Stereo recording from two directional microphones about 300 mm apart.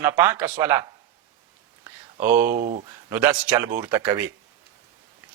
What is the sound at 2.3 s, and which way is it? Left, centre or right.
Speech, centre.